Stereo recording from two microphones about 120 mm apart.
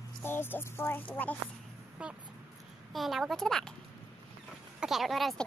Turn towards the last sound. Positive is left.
turn(degrees=0)  # may be behind; listen again after turning